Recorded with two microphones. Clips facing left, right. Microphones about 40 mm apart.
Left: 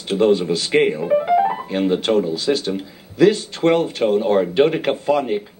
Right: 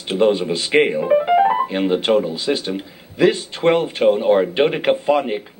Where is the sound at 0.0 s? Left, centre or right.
Centre.